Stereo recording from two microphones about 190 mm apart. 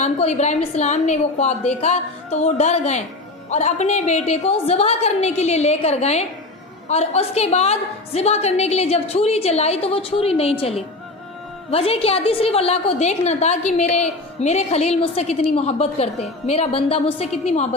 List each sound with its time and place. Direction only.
0.0 s a woman's voice: 35° left (ahead or behind)